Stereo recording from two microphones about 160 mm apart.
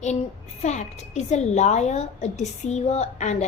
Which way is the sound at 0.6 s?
45° left (ahead or behind).